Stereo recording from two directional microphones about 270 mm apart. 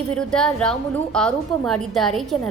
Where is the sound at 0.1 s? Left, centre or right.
Centre.